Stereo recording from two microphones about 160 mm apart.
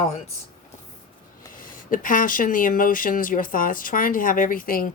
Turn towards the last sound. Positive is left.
turn(degrees=60)  # may be behind; listen again after turning